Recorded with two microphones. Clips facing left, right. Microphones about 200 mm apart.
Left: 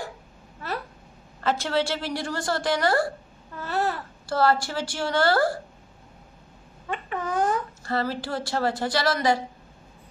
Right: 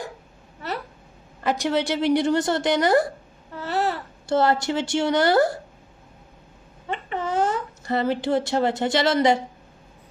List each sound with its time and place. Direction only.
1.4 s a woman's voice: 15° right (ahead or behind)
6.9 s speech: 25° right (ahead or behind)